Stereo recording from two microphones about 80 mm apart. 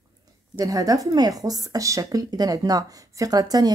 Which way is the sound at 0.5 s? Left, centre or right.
Right.